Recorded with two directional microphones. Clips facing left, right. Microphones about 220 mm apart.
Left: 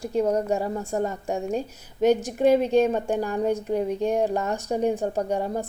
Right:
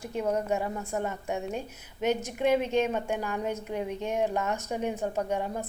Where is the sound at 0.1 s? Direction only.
35° left (ahead or behind).